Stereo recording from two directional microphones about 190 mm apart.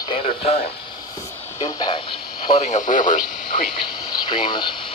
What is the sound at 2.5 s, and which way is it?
Speech, 35° left (ahead or behind).